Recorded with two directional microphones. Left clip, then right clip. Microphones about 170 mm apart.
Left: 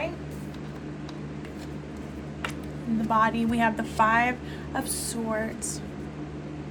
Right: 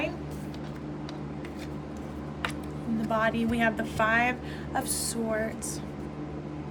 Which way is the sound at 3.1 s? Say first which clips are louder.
Left 4 dB; 25° left (ahead or behind).